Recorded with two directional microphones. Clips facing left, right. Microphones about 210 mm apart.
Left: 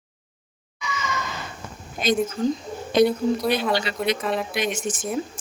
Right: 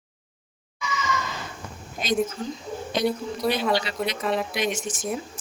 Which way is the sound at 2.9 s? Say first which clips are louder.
Left 7 dB; 55° left (ahead or behind).